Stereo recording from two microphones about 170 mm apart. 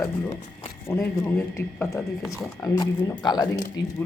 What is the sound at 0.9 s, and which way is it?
A man's voice, 10° left (ahead or behind).